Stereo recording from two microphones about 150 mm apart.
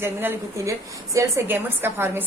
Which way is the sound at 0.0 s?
15° right (ahead or behind).